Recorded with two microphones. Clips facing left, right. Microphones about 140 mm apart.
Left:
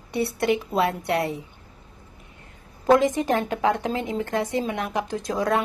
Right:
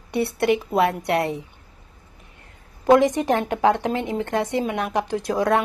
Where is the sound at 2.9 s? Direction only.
25° right (ahead or behind).